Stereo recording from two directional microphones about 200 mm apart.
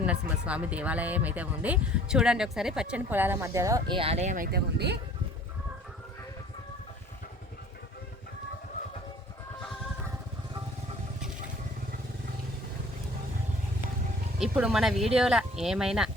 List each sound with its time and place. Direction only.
0.0 s speech: 5° right (ahead or behind); by 4.4 s 35° right (ahead or behind)
4.5 s speech: 55° right (ahead or behind)
14.3 s speech: 5° right (ahead or behind)